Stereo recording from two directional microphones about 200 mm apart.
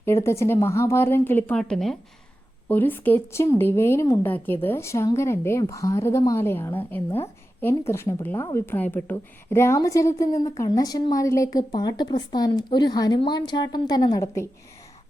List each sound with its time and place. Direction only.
0.0 s a woman's voice: 15° left (ahead or behind)